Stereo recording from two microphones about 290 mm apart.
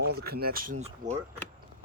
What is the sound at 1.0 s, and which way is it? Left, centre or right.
Speech, centre.